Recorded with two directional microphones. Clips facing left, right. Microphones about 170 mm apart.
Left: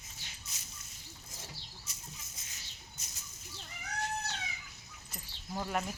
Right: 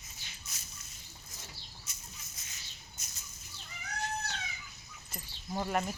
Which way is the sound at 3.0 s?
30° left (ahead or behind).